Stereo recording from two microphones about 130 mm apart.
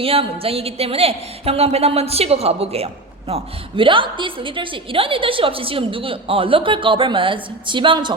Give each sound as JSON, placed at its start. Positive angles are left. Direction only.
{"t": 0.0, "sound": "a woman's voice", "side_deg": -45}